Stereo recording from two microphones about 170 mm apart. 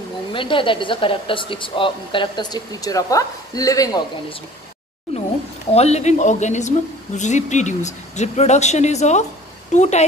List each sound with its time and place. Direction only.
0.3 s a woman's voice: 30° left (ahead or behind)
5.7 s a woman's voice: 40° left (ahead or behind)